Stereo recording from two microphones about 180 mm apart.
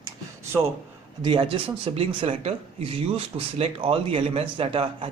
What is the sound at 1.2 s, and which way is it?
Speech, 30° right (ahead or behind).